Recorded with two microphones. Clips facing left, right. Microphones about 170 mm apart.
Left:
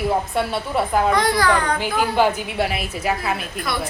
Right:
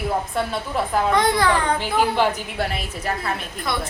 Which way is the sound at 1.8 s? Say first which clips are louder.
Left 1 dB; 5° left (ahead or behind).